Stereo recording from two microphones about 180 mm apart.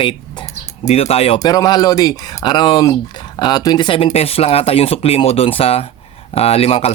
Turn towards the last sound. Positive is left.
turn(degrees=35)  # may be behind; listen again after turning